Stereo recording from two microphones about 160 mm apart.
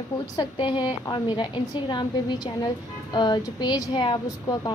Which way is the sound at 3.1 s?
25° left (ahead or behind).